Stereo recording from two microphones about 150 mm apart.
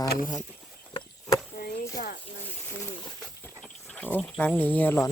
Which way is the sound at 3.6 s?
5° left (ahead or behind).